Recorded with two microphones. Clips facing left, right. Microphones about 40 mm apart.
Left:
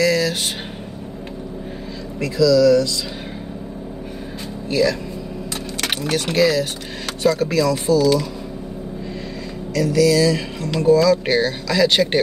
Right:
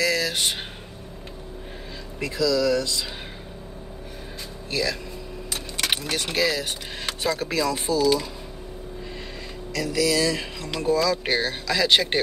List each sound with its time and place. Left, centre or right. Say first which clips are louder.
0.0 s a sound: left 5 dB; centre
2.1 s speech: left 8 dB; right
4.6 s speech: left 8 dB; centre
9.8 s speech: left 7 dB; centre